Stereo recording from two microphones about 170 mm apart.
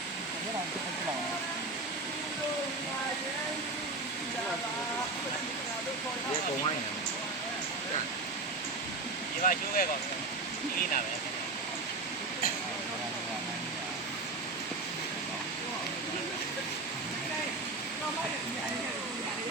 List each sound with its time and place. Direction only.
9.4 s speech: 50° left (ahead or behind)